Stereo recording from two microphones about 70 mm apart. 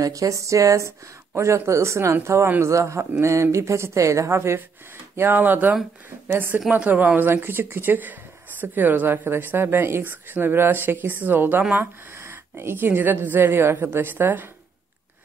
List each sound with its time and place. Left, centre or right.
0.0 s speech: right
5.1 s speech: right
6.8 s speech: centre